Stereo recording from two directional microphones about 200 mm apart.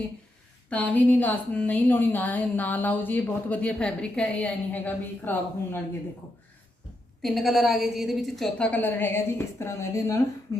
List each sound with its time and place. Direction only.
0.7 s a woman's voice: 5° left (ahead or behind)
7.2 s a woman's voice: centre (ahead or behind); by 10.6 s 15° left (ahead or behind)